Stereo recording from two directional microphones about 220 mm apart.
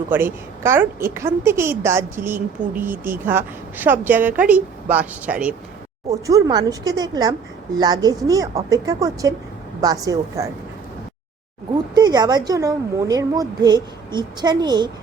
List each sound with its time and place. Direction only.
0.1 s a woman's voice: 10° right (ahead or behind)
11.7 s a woman's voice: 20° right (ahead or behind)